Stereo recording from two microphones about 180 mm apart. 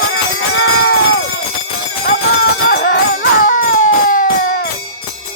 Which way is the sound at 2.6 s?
50° left (ahead or behind).